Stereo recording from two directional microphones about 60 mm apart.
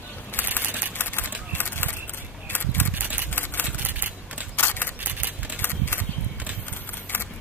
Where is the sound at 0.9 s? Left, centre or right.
Left.